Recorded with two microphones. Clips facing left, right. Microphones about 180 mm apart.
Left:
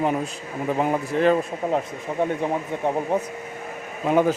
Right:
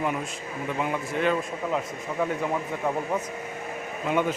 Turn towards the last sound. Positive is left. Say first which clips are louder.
# left 6 dB
turn(degrees=35)  # may be behind; listen again after turning